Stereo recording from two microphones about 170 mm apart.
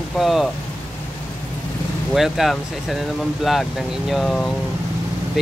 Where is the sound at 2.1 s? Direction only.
Centre (ahead or behind).